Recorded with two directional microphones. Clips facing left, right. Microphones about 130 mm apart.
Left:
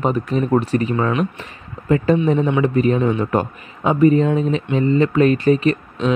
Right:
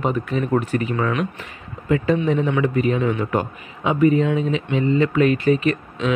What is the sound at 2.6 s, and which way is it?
Speech, 35° left (ahead or behind).